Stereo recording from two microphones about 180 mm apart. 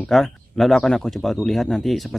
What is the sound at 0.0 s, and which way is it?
Speech, centre (ahead or behind).